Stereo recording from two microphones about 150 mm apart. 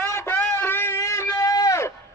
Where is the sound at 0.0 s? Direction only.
15° left (ahead or behind).